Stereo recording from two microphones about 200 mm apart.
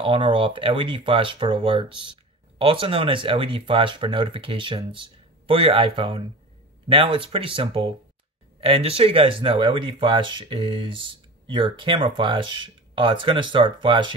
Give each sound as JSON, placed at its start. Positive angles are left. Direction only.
{"t": 0.0, "sound": "speech", "side_deg": -25}